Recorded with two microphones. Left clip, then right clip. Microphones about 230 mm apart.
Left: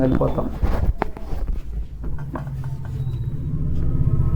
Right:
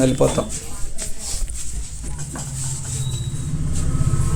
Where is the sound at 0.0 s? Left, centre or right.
Right.